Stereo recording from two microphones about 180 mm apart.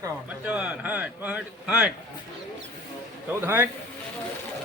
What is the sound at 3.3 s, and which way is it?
Speech, 10° right (ahead or behind).